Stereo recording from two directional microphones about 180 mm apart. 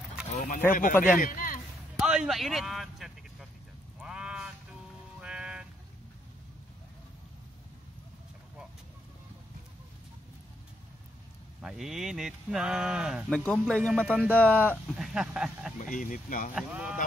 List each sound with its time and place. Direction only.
0.3 s speech: 45° left (ahead or behind)
2.0 s speech: 5° right (ahead or behind)
4.0 s a sound: 5° right (ahead or behind)
5.2 s music: 5° right (ahead or behind)
11.6 s speech: centre (ahead or behind)
15.0 s speech: 5° right (ahead or behind)
15.8 s speech: 45° left (ahead or behind)
16.5 s speech: 5° right (ahead or behind)